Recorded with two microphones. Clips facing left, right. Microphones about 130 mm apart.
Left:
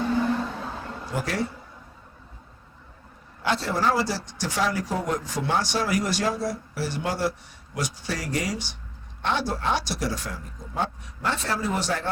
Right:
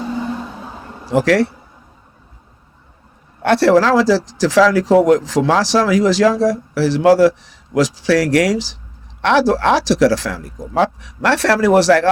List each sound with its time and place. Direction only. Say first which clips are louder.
0.2 s vehicle: right 1 dB; 15° right (ahead or behind)
1.1 s speech: right 14 dB; 90° right
3.4 s speech: right 12 dB; 75° right (ahead or behind); by 12.0 s 90° right